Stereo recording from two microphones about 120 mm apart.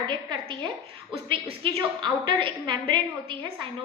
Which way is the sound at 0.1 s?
40° right (ahead or behind).